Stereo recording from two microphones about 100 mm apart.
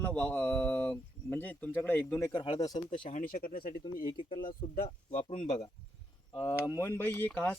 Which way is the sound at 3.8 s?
55° left (ahead or behind).